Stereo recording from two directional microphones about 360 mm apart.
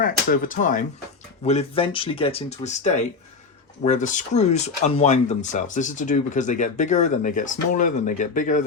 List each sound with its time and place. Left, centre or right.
0.0 s speech: left